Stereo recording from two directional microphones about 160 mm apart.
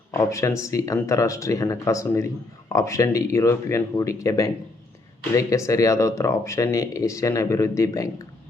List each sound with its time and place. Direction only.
0.1 s speech: 20° left (ahead or behind)